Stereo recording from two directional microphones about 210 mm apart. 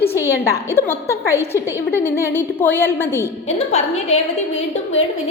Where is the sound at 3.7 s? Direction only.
30° left (ahead or behind).